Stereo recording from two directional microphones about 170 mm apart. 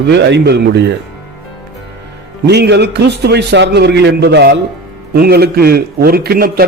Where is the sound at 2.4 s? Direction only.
80° right.